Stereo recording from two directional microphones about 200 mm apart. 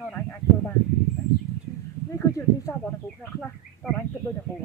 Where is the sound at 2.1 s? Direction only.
15° left (ahead or behind).